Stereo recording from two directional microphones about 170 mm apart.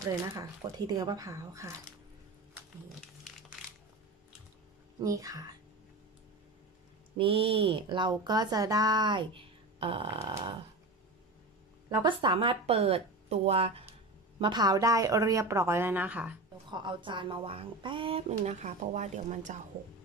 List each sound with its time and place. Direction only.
0.0 s speech: 20° right (ahead or behind)
5.0 s speech: 20° right (ahead or behind)
7.2 s speech: 35° right (ahead or behind)
11.9 s speech: 25° right (ahead or behind)
14.4 s speech: 25° right (ahead or behind); by 16.3 s 10° right (ahead or behind)
16.7 s speech: 30° right (ahead or behind); by 19.5 s 45° right (ahead or behind)